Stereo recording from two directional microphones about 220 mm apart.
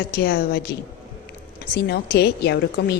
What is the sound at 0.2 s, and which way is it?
Speech, 45° left (ahead or behind).